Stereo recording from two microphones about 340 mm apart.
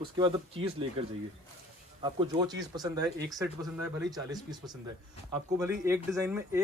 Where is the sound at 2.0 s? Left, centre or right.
Centre.